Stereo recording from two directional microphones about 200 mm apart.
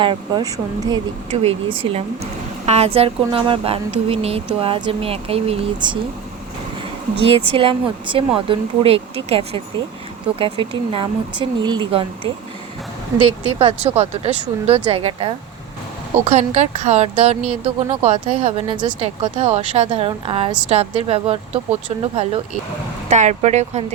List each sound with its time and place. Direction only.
0.0 s a woman's voice: 25° right (ahead or behind)
1.3 s a woman's voice: 30° right (ahead or behind)
7.2 s a woman's voice: 30° right (ahead or behind)
13.6 s a woman's voice: 30° right (ahead or behind)
18.7 s a woman's voice: 25° right (ahead or behind)